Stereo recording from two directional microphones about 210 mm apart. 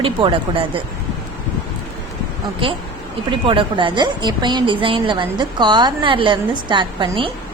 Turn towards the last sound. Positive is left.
turn(degrees=-25)  # may be behind; listen again after turning